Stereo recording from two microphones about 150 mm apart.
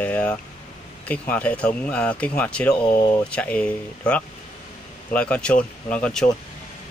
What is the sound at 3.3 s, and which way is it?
Speech, 10° left (ahead or behind).